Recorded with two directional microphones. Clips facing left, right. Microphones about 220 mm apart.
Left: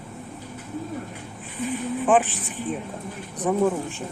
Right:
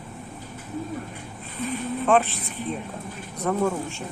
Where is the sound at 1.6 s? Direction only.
15° left (ahead or behind).